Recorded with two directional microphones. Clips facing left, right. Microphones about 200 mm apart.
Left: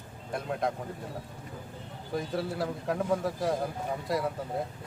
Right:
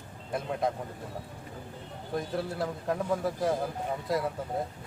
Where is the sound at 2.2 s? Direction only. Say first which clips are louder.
Even; centre (ahead or behind).